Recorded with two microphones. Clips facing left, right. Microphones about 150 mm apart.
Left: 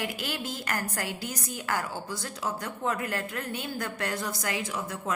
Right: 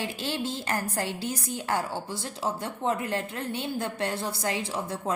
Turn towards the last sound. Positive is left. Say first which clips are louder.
# right 2 dB
turn(degrees=-30)  # may be behind; listen again after turning